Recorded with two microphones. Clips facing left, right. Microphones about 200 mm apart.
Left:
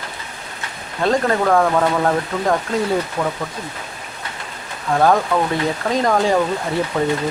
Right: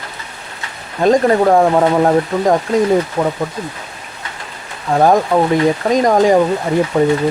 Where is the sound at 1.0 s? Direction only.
20° right (ahead or behind).